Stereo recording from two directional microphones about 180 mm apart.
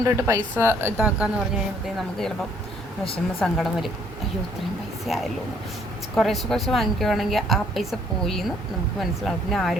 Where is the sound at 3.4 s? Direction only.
Centre (ahead or behind).